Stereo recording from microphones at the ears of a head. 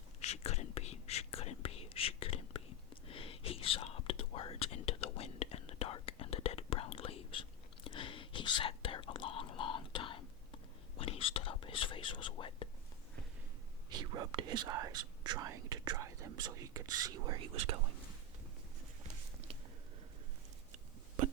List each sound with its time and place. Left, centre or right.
0.2 s whispering: left
13.9 s whispering: right
19.0 s a sound: right